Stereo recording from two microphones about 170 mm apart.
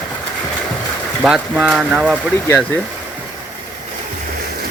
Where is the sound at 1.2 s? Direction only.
5° right (ahead or behind).